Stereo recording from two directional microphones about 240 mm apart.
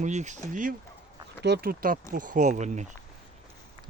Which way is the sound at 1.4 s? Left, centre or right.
Right.